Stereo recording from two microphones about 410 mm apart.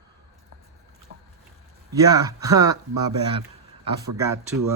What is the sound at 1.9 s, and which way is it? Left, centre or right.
Speech, centre.